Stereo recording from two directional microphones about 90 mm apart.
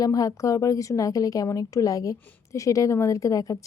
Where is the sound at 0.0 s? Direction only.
40° left (ahead or behind).